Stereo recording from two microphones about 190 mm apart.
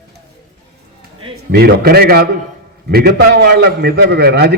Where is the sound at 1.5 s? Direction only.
55° right (ahead or behind).